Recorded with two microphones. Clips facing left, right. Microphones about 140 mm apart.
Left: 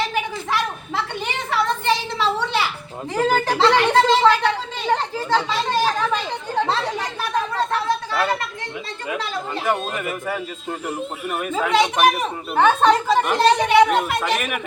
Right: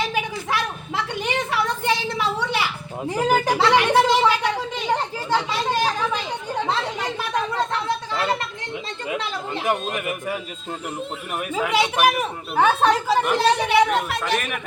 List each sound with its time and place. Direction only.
1.5 s a sound: 10° right (ahead or behind)
3.2 s speech: 15° right (ahead or behind)
4.9 s chatter: 10° right (ahead or behind)
9.6 s speech: 15° right (ahead or behind)
11.5 s speech: 10° right (ahead or behind)